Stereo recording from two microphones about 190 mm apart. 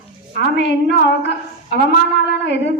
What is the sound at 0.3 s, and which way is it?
Music, 65° left (ahead or behind).